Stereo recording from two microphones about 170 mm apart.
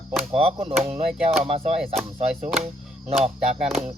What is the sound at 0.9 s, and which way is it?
Speech, 35° right (ahead or behind).